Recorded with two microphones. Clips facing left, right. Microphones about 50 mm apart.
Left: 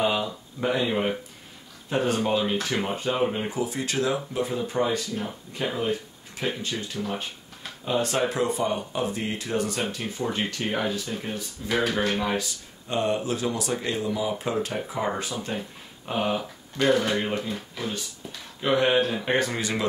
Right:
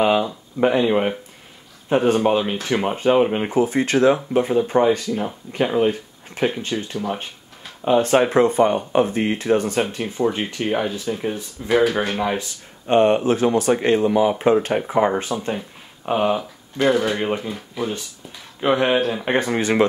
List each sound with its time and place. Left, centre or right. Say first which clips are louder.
0.0 s speech: right 7 dB; right
10.6 s speech: right 8 dB; centre
11.6 s speech: right 8 dB; right
12.8 s speech: right 10 dB; right
16.1 s speech: right 7 dB; right
16.3 s speech: right 4 dB; centre
18.9 s speech: right 3 dB; centre
19.2 s speech: right 5 dB; right